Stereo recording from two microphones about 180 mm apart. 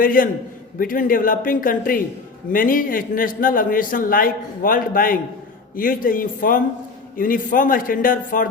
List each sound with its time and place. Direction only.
0.0 s a man's voice: 50° left (ahead or behind)